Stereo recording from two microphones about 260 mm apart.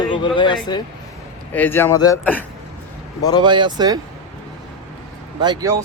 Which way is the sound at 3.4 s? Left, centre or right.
Centre.